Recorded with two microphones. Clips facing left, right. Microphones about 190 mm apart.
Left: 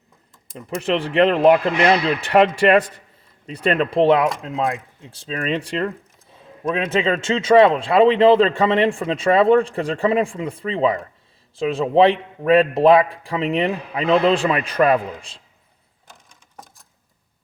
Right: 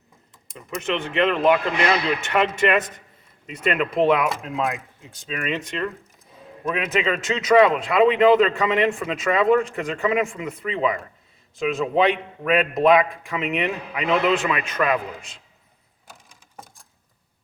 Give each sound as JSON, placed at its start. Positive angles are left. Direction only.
{"t": 0.5, "sound": "speech", "side_deg": 35}